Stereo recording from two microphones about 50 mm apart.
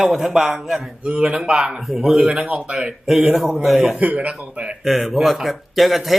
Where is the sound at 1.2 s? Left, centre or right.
Centre.